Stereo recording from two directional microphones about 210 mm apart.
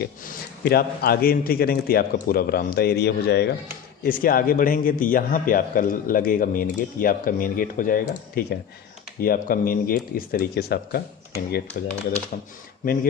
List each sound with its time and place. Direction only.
0.6 s a man's voice: 45° left (ahead or behind)
11.7 s a man's voice: 35° left (ahead or behind)